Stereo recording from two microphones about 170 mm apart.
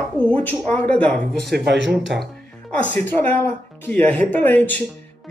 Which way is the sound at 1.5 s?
90° right.